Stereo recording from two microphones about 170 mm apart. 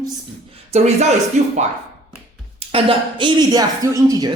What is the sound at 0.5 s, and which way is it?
Speech, 40° right (ahead or behind).